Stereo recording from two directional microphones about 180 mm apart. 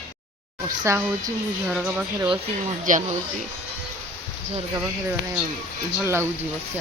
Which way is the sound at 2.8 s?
45° right (ahead or behind).